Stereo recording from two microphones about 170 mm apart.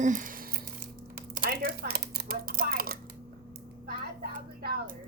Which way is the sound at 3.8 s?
60° right (ahead or behind).